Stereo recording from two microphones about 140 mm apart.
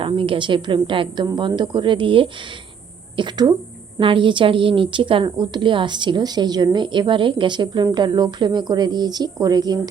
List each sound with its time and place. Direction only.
0.0 s a woman's voice: 40° right (ahead or behind)